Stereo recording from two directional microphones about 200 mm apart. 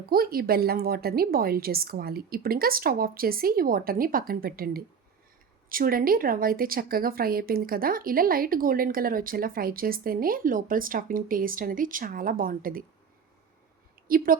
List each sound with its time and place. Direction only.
0.1 s speech: 45° right (ahead or behind)
14.1 s speech: 45° right (ahead or behind)